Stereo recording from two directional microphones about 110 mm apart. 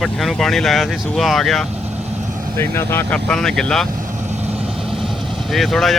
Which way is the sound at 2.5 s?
20° left (ahead or behind).